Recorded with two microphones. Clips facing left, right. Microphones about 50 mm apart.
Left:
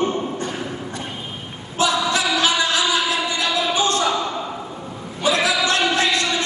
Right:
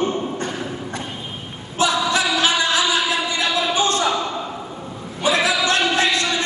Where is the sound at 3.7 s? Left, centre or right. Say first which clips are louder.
Left 1 dB; right.